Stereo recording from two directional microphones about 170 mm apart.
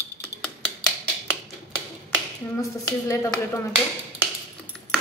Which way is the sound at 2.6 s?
20° left (ahead or behind).